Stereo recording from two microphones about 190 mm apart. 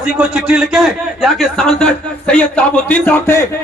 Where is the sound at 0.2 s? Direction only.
5° right (ahead or behind).